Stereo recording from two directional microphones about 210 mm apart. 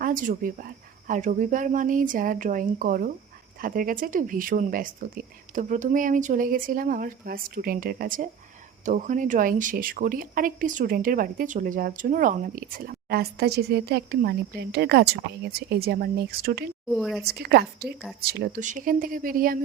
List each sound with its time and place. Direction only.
0.0 s speech: 40° right (ahead or behind)
16.9 s speech: centre (ahead or behind)
17.2 s speech: 50° right (ahead or behind)